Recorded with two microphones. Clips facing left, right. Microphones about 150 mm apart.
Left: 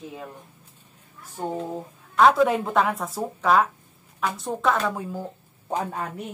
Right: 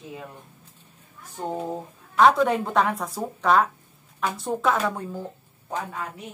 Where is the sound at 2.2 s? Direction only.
Centre (ahead or behind).